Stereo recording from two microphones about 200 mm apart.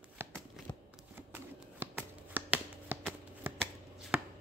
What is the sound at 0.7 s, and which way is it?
Shuffling cards, 5° left (ahead or behind).